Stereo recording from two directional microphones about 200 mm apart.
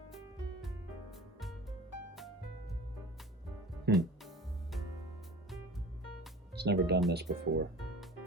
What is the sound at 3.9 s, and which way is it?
Speech, 55° right (ahead or behind).